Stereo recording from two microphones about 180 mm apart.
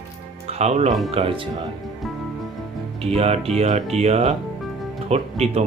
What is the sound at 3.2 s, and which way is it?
Speech, 35° right (ahead or behind).